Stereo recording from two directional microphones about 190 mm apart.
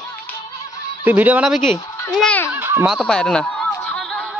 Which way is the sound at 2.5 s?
10° right (ahead or behind).